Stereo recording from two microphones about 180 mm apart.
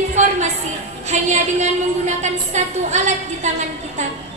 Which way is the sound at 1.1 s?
40° right (ahead or behind).